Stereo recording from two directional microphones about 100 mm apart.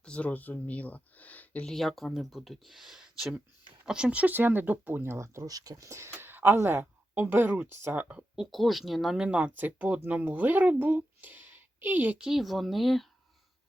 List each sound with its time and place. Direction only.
0.0 s speech: 10° left (ahead or behind)
1.7 s speech: centre (ahead or behind); by 8.2 s 20° right (ahead or behind)
8.4 s speech: centre (ahead or behind); by 12.2 s 20° right (ahead or behind)
12.2 s speech: 5° right (ahead or behind)